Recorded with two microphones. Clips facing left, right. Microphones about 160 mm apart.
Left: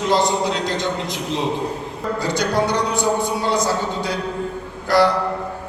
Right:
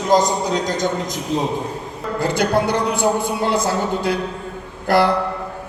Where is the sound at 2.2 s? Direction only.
55° right (ahead or behind).